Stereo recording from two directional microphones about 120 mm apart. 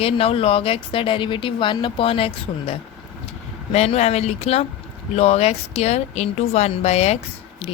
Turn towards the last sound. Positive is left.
turn(degrees=65)  # may be behind; listen again after turning